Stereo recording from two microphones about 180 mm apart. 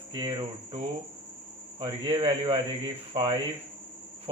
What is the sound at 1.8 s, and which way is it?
A man's voice, 25° right (ahead or behind).